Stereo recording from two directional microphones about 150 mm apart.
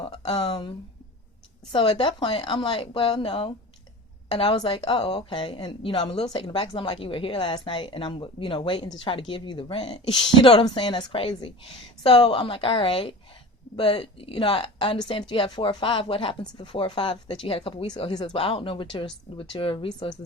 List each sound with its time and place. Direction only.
0.3 s speech: 30° left (ahead or behind)